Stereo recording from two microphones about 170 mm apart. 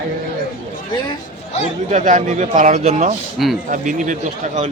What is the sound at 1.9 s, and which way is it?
Speech, 45° right (ahead or behind).